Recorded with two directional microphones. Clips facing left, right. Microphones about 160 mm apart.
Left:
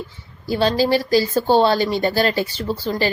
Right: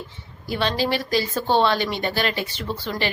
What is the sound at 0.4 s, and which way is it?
A woman's voice, 35° left (ahead or behind).